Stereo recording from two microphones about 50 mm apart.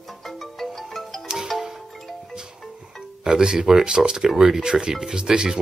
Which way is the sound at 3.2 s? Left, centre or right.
Centre.